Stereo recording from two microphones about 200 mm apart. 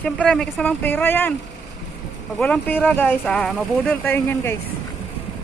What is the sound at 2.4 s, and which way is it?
Speech, 5° left (ahead or behind).